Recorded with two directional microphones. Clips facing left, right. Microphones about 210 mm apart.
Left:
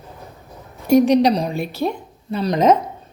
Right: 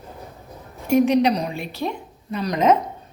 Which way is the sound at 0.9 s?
35° left (ahead or behind).